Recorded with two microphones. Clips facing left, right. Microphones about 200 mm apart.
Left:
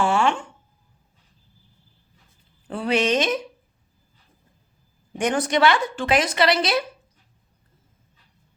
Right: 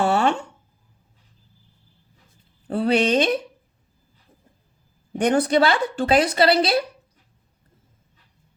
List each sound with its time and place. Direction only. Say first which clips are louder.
0.0 s a sound: right 1 dB; 40° right (ahead or behind)
2.6 s a woman's voice: right 2 dB; 35° right (ahead or behind)
5.1 s a woman's voice: right 4 dB; 35° right (ahead or behind)